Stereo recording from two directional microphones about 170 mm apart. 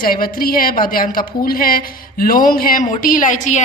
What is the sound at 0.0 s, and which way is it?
A woman's voice, 60° left (ahead or behind).